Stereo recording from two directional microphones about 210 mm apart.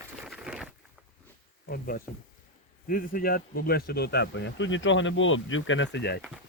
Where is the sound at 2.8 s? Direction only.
40° left (ahead or behind).